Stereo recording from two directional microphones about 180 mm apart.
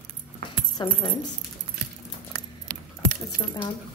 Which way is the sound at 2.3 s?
65° right (ahead or behind).